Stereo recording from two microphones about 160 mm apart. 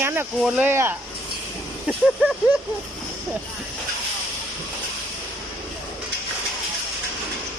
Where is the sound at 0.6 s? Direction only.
15° right (ahead or behind).